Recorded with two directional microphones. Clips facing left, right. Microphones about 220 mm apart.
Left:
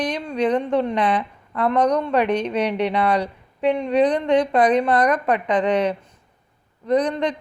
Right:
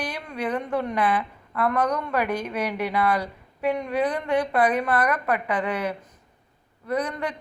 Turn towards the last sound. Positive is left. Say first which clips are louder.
# left 7 dB
turn(degrees=30)  # may be behind; listen again after turning